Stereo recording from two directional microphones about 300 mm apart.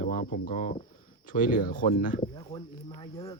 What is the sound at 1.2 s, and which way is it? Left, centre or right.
Speech, left.